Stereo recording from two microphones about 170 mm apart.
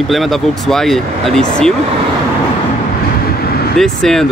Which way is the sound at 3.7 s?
5° left (ahead or behind).